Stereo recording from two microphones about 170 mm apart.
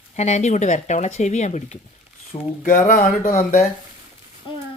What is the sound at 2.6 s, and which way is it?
Speech, 55° left (ahead or behind).